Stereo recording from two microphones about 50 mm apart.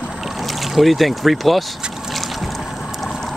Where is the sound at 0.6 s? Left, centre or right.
Centre.